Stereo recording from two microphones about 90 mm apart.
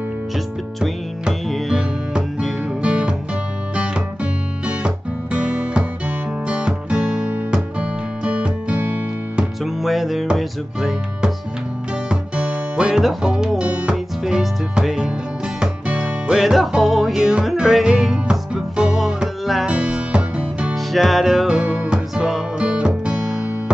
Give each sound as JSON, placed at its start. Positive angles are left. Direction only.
{"t": 0.7, "sound": "music", "side_deg": 0}
{"t": 9.4, "sound": "music", "side_deg": 0}
{"t": 20.7, "sound": "music", "side_deg": 0}